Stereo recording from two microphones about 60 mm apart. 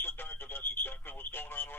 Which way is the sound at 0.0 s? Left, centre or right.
Left.